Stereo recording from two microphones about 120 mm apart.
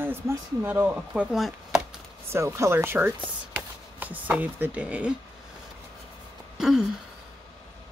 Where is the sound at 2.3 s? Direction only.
25° right (ahead or behind).